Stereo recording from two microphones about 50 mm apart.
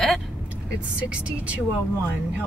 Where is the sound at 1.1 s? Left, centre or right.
Right.